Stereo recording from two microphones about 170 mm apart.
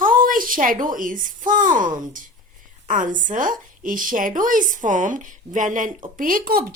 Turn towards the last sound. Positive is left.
turn(degrees=-60)  # may be behind; listen again after turning